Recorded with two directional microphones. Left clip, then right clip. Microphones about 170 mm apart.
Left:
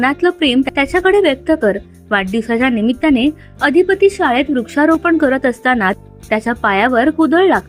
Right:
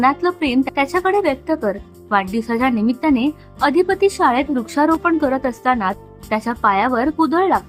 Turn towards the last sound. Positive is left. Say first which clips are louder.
# left 4 dB
turn(degrees=15)  # may be behind; listen again after turning